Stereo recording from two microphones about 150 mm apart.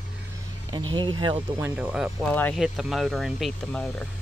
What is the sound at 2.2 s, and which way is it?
Speech, 10° left (ahead or behind).